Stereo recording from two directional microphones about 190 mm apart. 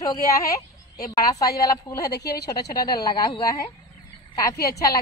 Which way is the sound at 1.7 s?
20° left (ahead or behind).